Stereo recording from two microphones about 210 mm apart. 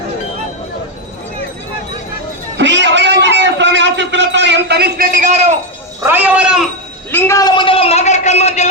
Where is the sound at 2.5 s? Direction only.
55° right (ahead or behind); by 5.5 s 35° right (ahead or behind).